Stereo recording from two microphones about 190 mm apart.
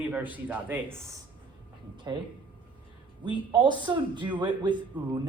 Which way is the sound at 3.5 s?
25° right (ahead or behind).